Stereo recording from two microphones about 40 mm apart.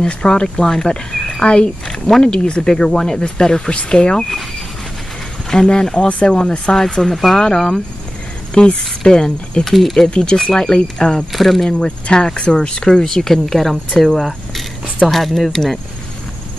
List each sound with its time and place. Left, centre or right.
0.2 s speech: centre
1.4 s speech: left
1.9 s speech: centre
5.5 s speech: centre
6.7 s speech: centre
9.7 s speech: centre
9.9 s speech: centre
11.3 s speech: centre
11.8 s speech: centre
12.8 s speech: centre